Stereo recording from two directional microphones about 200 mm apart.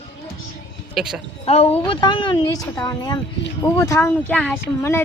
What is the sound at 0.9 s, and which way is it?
Speech, centre (ahead or behind).